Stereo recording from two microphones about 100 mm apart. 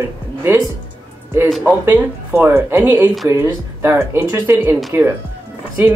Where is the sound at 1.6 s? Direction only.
20° right (ahead or behind).